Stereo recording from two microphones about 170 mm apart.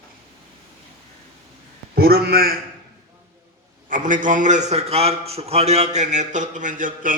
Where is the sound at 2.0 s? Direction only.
65° right (ahead or behind).